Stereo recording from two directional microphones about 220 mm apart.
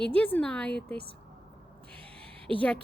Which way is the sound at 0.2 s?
5° left (ahead or behind).